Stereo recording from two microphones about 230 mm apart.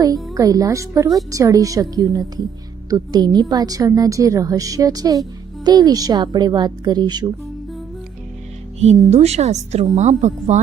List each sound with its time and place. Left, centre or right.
0.3 s a woman's voice: centre
8.8 s a woman's voice: right